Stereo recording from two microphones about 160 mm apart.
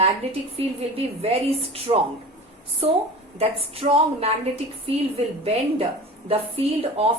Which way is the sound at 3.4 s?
35° right (ahead or behind).